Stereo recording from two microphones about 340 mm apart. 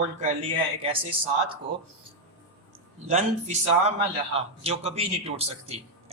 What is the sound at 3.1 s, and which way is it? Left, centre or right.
A man's voice, centre.